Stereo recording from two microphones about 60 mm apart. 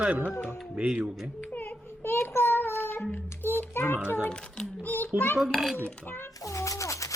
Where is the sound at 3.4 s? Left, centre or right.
Left.